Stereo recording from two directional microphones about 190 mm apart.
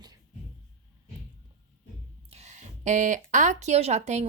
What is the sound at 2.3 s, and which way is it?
Speech, 35° right (ahead or behind).